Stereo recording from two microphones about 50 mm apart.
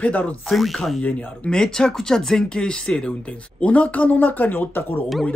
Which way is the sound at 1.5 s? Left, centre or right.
Centre.